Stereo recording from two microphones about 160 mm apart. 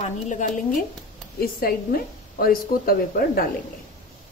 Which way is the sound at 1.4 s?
70° left (ahead or behind).